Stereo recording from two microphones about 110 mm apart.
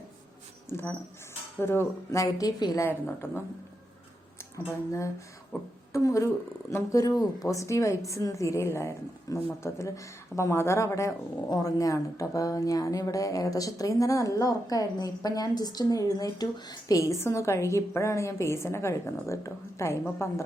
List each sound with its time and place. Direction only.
0.7 s speech: 20° left (ahead or behind)
2.8 s speech: 20° left (ahead or behind)
4.5 s speech: 25° left (ahead or behind)